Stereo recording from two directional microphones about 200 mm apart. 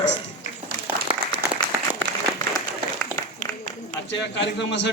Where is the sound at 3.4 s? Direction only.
40° left (ahead or behind).